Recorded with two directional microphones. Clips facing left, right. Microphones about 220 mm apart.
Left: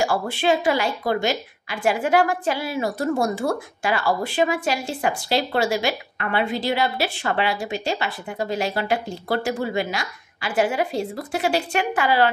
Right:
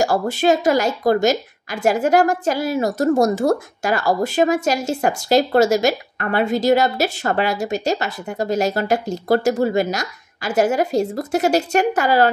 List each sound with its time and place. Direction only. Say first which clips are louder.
0.0 s a woman's voice: right 4 dB; 40° right (ahead or behind)